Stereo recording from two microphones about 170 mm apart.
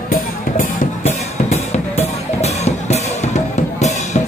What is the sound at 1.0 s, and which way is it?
Music, 40° left (ahead or behind).